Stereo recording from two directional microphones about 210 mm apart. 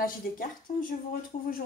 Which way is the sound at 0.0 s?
40° left (ahead or behind).